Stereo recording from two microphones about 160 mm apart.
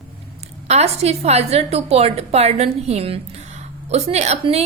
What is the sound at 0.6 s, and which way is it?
A woman's voice, 40° right (ahead or behind).